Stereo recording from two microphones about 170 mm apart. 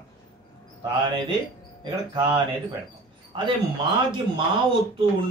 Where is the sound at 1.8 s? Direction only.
25° right (ahead or behind).